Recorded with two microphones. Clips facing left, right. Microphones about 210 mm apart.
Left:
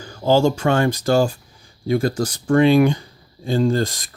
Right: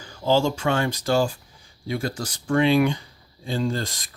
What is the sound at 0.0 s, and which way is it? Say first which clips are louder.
Speech: left 5 dB; 45° left (ahead or behind).